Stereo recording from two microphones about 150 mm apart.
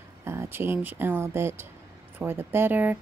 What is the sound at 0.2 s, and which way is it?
Speech, 15° right (ahead or behind).